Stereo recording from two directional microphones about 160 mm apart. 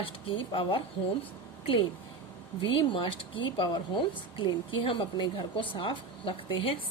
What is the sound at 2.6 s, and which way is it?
Speech, 35° left (ahead or behind).